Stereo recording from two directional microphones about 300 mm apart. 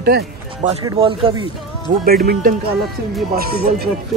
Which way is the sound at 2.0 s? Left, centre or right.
Right.